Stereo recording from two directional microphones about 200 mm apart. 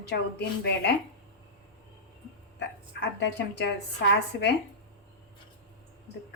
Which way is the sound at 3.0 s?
60° left (ahead or behind).